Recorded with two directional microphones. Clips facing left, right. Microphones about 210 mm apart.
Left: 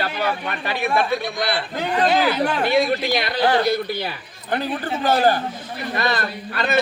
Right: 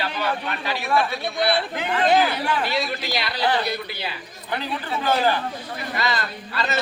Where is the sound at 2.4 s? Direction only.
55° left (ahead or behind).